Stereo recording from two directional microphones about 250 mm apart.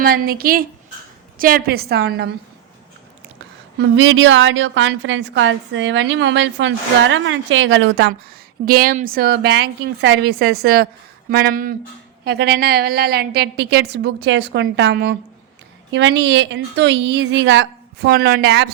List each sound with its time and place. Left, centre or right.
0.0 s a woman's voice: right
3.8 s a woman's voice: right
8.6 s a woman's voice: right